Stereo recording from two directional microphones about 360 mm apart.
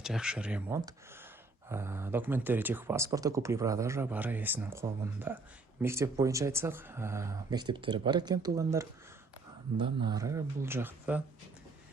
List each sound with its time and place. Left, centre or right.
0.0 s speech: centre